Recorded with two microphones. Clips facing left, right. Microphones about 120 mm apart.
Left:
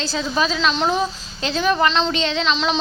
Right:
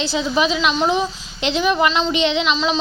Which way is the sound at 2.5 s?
Centre (ahead or behind).